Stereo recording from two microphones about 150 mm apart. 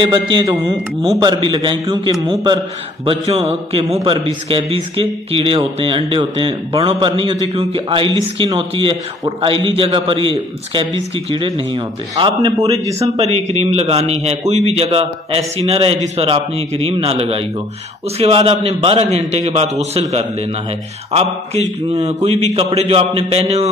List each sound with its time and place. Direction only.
0.0 s a man's voice: 30° right (ahead or behind)
3.1 s a man's voice: 45° right (ahead or behind); by 13.1 s 20° right (ahead or behind)
13.2 s a man's voice: 45° right (ahead or behind)